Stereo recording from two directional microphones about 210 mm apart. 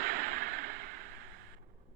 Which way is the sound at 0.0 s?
45° right (ahead or behind).